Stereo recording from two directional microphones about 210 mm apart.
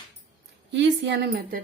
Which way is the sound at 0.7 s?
60° right (ahead or behind).